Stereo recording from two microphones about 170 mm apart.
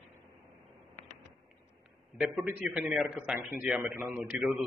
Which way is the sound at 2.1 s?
5° right (ahead or behind).